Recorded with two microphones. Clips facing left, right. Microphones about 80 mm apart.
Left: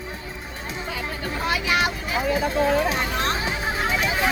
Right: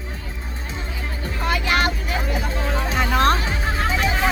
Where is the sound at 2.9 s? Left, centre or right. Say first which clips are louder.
Right 6 dB; right.